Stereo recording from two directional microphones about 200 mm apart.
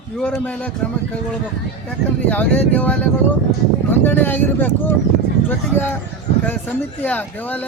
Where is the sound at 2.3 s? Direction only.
5° left (ahead or behind).